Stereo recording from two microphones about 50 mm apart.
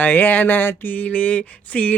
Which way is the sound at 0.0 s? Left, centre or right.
Left.